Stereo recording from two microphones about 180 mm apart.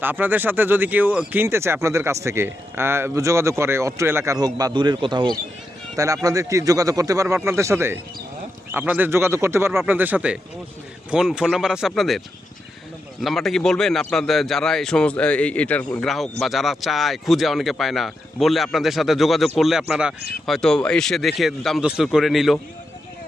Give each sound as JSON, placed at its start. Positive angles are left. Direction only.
{"t": 0.0, "sound": "speech", "side_deg": -10}
{"t": 13.2, "sound": "speech", "side_deg": 0}